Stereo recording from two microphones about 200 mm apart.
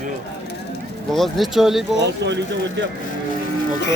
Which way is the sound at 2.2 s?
60° right (ahead or behind).